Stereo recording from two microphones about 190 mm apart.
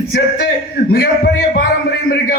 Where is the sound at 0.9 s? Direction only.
55° left (ahead or behind).